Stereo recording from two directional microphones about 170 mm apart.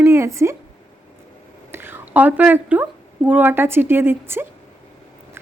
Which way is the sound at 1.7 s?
15° right (ahead or behind).